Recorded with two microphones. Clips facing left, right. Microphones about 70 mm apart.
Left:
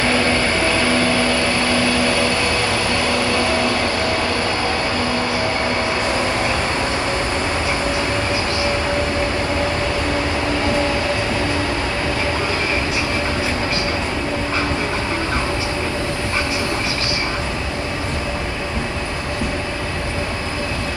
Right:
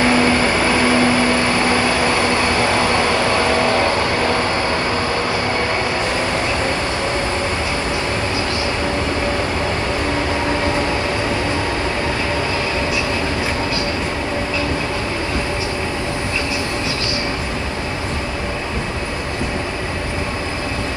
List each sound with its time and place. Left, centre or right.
0.0 s vehicle: right